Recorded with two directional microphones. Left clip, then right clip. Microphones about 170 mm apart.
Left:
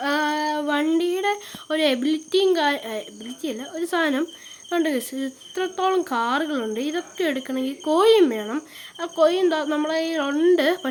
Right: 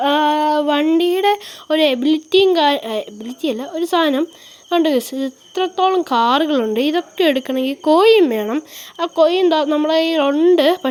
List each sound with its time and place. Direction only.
0.0 s female singing: 25° right (ahead or behind)
4.7 s speech: 30° right (ahead or behind)